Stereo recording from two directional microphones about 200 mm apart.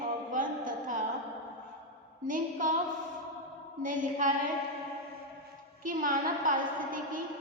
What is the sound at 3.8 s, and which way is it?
Mantra, 40° right (ahead or behind).